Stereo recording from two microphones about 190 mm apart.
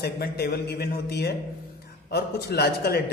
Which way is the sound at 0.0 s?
60° left (ahead or behind).